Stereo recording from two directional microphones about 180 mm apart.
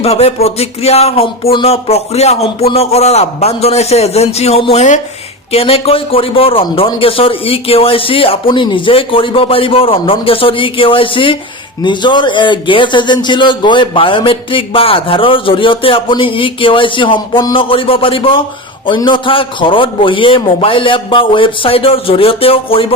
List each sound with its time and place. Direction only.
0.0 s a man's voice: 35° left (ahead or behind)